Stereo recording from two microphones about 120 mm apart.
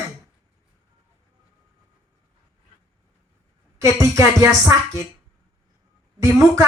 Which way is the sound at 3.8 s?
25° right (ahead or behind).